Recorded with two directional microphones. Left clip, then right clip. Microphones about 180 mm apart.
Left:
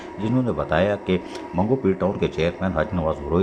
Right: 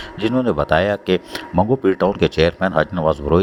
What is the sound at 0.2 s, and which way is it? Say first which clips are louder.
Speech: right 6 dB; 35° right (ahead or behind).